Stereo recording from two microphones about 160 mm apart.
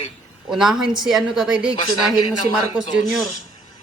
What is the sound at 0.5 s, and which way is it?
A woman's voice, 5° right (ahead or behind).